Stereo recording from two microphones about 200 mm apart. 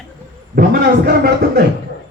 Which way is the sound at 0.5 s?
50° right (ahead or behind).